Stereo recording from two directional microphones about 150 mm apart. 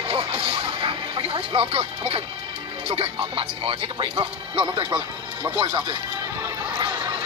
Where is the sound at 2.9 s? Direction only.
40° right (ahead or behind).